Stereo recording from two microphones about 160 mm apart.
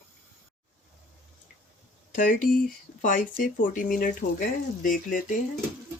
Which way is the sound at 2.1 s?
60° left (ahead or behind).